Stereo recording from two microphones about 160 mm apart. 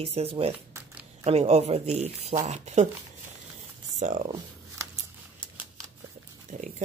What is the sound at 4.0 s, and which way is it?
Speech, 45° right (ahead or behind).